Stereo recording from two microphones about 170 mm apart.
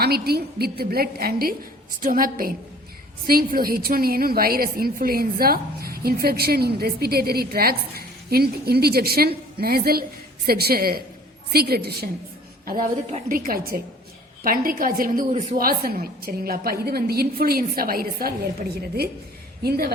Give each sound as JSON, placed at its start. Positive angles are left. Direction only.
{"t": 0.0, "sound": "a woman's voice", "side_deg": -70}
{"t": 13.2, "sound": "a woman's voice", "side_deg": -55}
{"t": 15.3, "sound": "a woman's voice", "side_deg": -45}
{"t": 19.6, "sound": "a woman's voice", "side_deg": -65}